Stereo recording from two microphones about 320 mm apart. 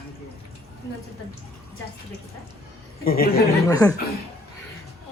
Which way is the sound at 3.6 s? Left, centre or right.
Centre.